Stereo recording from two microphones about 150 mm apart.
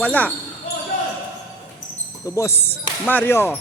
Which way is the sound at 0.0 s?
10° left (ahead or behind).